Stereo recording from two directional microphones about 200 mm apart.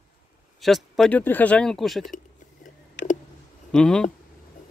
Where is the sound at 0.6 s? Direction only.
Centre (ahead or behind).